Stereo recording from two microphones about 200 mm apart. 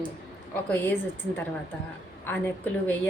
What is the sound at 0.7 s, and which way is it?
A woman's voice, 10° left (ahead or behind).